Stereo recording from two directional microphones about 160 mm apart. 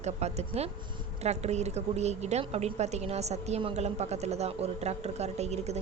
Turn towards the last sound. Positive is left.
turn(degrees=-40)  # may be behind; listen again after turning